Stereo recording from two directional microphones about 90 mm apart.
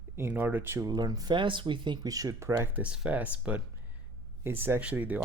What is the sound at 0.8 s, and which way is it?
Speech, 45° right (ahead or behind).